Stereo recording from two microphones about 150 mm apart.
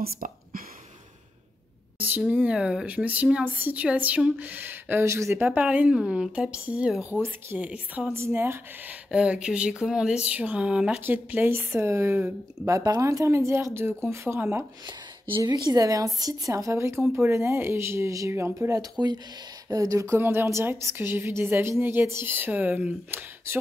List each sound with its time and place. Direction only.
0.0 s speech: 80° right
2.0 s speech: 10° right (ahead or behind)